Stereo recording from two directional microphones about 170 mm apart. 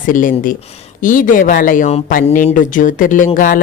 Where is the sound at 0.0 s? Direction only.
50° left (ahead or behind).